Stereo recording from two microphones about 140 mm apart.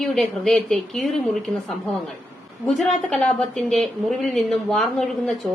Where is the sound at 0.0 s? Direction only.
5° left (ahead or behind).